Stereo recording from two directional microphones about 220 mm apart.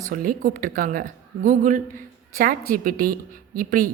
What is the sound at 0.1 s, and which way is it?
A woman's voice, 40° right (ahead or behind).